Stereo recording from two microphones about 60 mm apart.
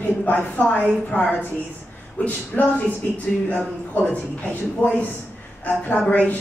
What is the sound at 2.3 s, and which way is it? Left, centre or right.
A woman's voice, left.